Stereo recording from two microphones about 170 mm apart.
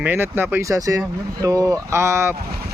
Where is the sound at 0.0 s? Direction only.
10° right (ahead or behind).